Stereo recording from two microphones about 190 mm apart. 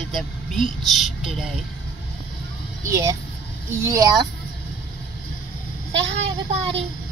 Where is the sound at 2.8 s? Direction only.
15° right (ahead or behind).